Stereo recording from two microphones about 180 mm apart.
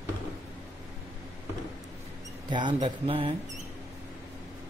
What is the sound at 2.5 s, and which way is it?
Speech, 25° right (ahead or behind).